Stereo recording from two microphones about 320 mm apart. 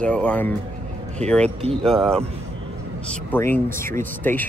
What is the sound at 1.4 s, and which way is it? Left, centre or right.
Speech, centre.